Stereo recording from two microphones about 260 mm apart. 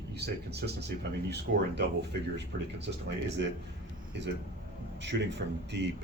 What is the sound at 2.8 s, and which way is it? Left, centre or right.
Speech, right.